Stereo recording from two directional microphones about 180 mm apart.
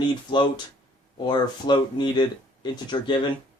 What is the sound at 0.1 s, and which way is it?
Speech, 25° left (ahead or behind).